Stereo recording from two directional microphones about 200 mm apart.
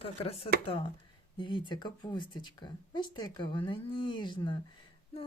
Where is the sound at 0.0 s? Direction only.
30° left (ahead or behind).